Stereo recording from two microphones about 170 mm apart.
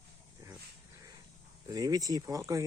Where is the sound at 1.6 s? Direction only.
20° right (ahead or behind).